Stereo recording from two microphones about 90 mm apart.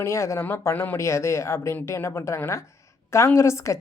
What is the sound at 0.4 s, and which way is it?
Speech, 25° left (ahead or behind).